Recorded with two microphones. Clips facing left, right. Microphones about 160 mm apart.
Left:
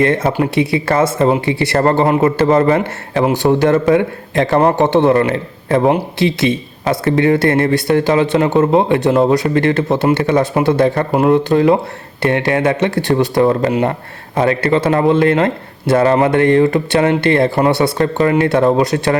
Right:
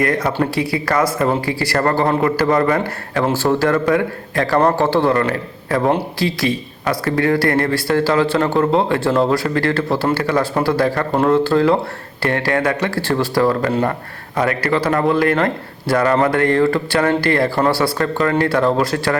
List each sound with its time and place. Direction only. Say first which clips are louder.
0.0 s speech: left 4 dB; 25° left (ahead or behind)